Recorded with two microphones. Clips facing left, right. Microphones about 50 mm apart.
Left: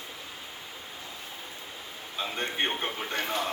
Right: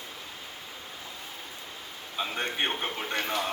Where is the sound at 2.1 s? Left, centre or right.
Centre.